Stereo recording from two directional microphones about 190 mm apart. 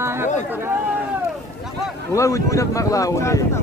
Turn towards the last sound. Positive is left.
turn(degrees=15)  # may be behind; listen again after turning